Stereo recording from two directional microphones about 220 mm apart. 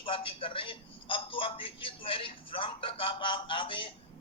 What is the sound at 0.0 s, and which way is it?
A man's voice, 25° left (ahead or behind).